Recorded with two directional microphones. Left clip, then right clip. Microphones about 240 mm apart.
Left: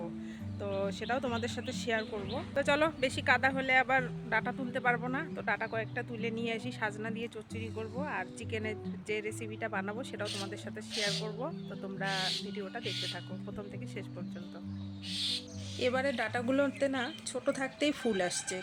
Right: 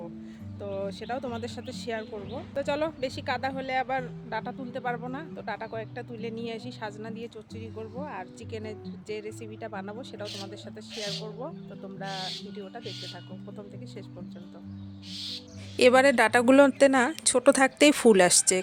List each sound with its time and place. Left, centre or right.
0.6 s speech: centre
11.0 s music: centre
15.1 s music: right
15.8 s speech: right